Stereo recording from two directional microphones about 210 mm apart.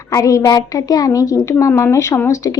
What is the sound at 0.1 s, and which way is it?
A woman's voice, 15° left (ahead or behind).